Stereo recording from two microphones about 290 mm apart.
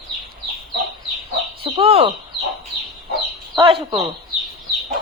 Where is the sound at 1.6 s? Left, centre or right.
Centre.